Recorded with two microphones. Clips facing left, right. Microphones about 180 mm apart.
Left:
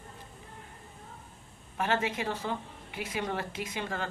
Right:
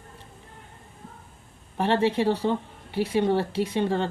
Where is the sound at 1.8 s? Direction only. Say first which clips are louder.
Right 8 dB; 30° right (ahead or behind).